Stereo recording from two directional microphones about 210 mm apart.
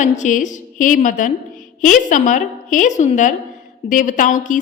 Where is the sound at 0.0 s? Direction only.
35° left (ahead or behind).